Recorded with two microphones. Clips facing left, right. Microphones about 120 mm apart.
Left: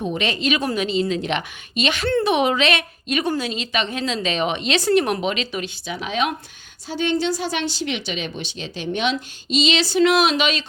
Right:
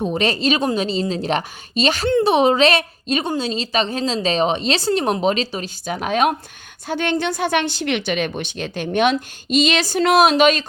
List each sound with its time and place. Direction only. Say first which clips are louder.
0.0 s a woman's voice: right 4 dB; 35° right (ahead or behind)
6.8 s a woman's voice: right 1 dB; 60° right (ahead or behind)